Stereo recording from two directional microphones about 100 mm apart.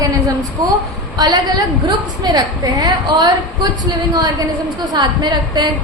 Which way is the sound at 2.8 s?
40° right (ahead or behind).